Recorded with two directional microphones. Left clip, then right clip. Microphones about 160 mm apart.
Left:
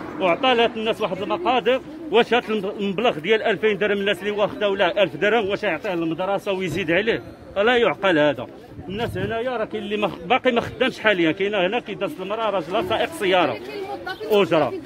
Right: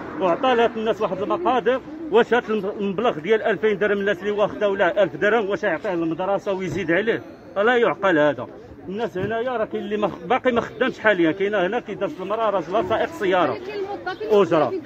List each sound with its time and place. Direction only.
0.2 s a man's voice: 5° left (ahead or behind)
3.3 s a man's voice: 65° left (ahead or behind)
4.3 s a man's voice: 15° left (ahead or behind)
6.6 s a man's voice: 75° left (ahead or behind)
8.1 s a man's voice: 20° left (ahead or behind)
10.8 s a man's voice: 65° left (ahead or behind)
11.5 s a man's voice: 15° left (ahead or behind)
14.3 s speech: 5° left (ahead or behind)